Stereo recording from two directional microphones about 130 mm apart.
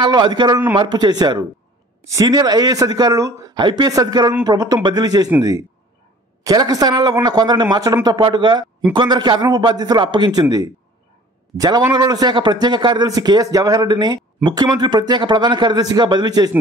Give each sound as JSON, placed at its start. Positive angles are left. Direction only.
{"t": 0.0, "sound": "a man's voice", "side_deg": -35}
{"t": 6.4, "sound": "a man's voice", "side_deg": -30}